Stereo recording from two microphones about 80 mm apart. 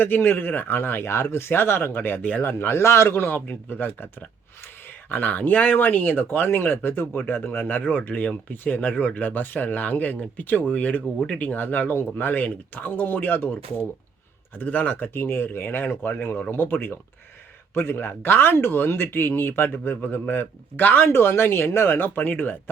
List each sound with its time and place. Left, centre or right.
0.0 s speech: left